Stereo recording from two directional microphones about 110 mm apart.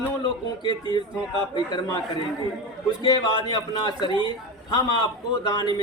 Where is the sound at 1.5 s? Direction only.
40° left (ahead or behind).